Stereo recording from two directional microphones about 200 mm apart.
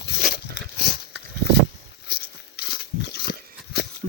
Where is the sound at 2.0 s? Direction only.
50° left (ahead or behind).